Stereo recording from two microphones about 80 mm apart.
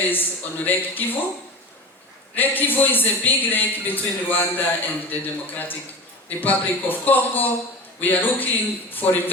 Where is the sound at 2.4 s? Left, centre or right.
Left.